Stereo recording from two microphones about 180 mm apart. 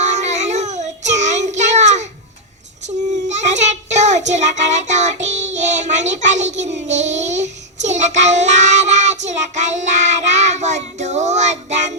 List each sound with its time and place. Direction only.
0.0 s child singing: 40° right (ahead or behind)